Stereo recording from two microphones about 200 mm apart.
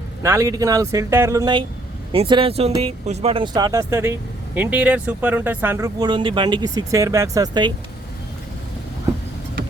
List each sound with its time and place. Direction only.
0.2 s speech: 15° right (ahead or behind)